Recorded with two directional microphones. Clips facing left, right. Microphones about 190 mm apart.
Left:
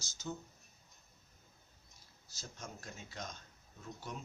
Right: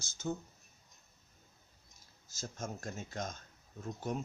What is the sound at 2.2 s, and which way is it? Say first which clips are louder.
Speech: right 7 dB; 45° right (ahead or behind).